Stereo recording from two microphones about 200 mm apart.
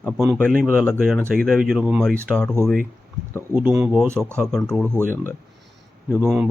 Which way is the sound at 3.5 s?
10° right (ahead or behind).